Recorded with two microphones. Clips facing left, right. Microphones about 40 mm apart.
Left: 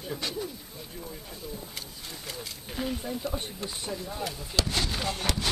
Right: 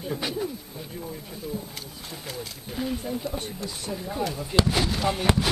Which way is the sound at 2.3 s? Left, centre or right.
Centre.